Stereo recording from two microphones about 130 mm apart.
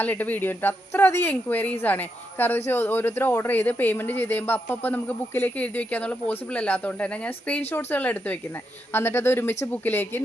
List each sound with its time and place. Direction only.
0.0 s speech: 15° left (ahead or behind)